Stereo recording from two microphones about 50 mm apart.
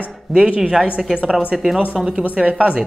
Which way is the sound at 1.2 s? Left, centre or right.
Centre.